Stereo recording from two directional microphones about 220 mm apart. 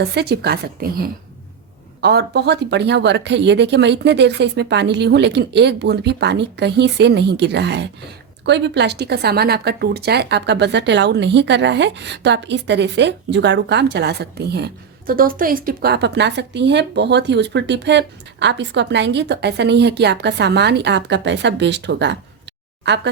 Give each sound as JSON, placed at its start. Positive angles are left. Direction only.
{"t": 0.0, "sound": "speech", "side_deg": -50}